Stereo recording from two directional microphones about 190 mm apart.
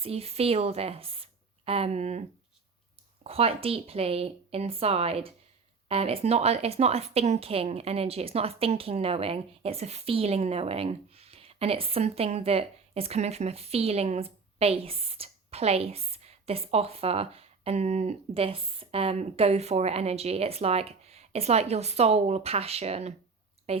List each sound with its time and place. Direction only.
0.0 s speech: 30° right (ahead or behind)
3.2 s a woman's voice: 30° right (ahead or behind)